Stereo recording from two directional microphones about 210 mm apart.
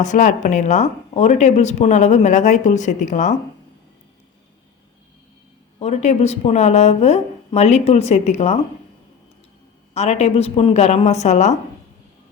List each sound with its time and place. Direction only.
0.0 s speech: 35° left (ahead or behind)
5.8 s speech: 30° left (ahead or behind)
9.9 s speech: 30° left (ahead or behind)